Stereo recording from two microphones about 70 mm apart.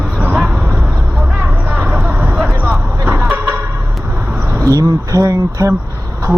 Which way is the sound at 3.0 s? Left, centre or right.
Right.